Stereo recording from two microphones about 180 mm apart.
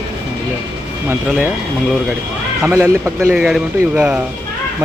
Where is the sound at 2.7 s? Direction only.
15° right (ahead or behind).